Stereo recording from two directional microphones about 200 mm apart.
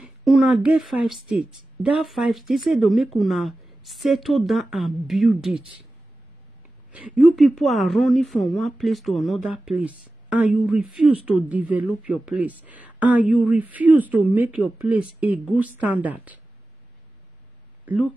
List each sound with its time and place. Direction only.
0.0 s speech: centre (ahead or behind)
6.9 s speech: 5° right (ahead or behind)